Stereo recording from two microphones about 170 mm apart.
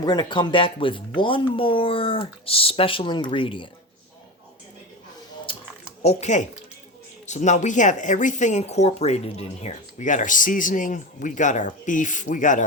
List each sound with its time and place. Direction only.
0.0 s speech: 25° left (ahead or behind)
6.0 s speech: 40° left (ahead or behind)